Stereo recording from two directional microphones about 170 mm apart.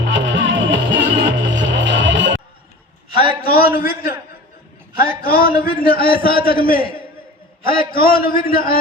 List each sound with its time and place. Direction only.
0.0 s music: 90° right
3.4 s a sound: 60° left (ahead or behind)
3.8 s a man's voice: 60° left (ahead or behind)